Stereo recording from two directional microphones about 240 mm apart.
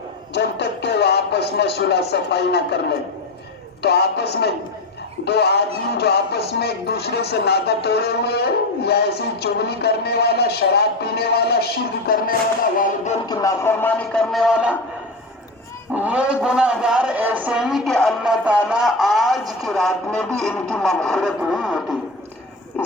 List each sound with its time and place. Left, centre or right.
0.3 s music: left
3.8 s music: left
12.7 s a sound: left
13.2 s a man's voice: centre
16.0 s a man's voice: centre